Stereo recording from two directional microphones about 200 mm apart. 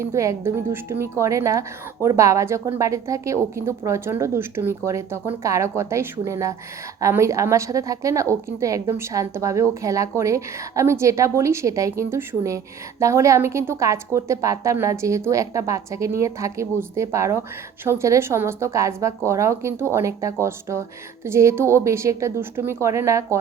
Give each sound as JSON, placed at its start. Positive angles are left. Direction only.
{"t": 0.0, "sound": "a woman's voice", "side_deg": -15}